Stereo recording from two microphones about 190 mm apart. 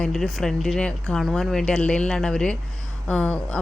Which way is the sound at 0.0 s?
Centre (ahead or behind).